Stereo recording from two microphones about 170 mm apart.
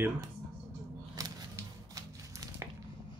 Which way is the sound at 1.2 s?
20° right (ahead or behind).